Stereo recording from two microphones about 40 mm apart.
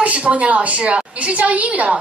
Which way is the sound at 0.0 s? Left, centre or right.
Right.